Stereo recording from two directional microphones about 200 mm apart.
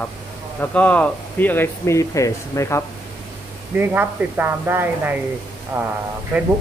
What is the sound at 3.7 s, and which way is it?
Speech, 10° right (ahead or behind).